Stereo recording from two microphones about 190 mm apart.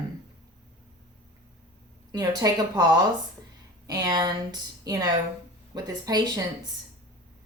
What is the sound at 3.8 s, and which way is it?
A woman's voice, 20° right (ahead or behind).